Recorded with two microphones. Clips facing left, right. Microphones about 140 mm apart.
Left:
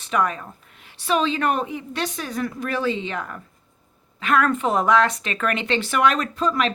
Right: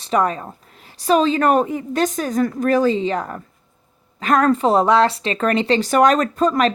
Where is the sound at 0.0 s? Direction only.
35° right (ahead or behind).